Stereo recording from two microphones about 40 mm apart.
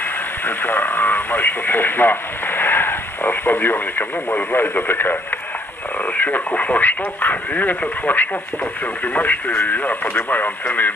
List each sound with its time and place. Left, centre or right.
0.4 s speech: left
6.1 s speech: left
6.5 s speech: left